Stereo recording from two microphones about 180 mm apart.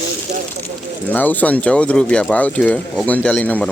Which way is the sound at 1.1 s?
10° left (ahead or behind).